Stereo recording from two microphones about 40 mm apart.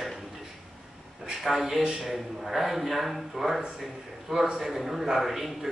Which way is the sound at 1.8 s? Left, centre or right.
Centre.